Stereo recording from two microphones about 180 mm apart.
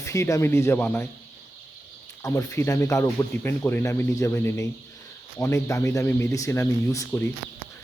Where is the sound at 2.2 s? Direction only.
15° left (ahead or behind).